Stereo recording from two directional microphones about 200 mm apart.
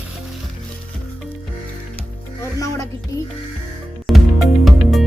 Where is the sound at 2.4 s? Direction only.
15° left (ahead or behind).